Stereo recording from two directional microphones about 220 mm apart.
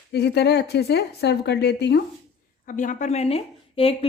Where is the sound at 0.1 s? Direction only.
50° left (ahead or behind).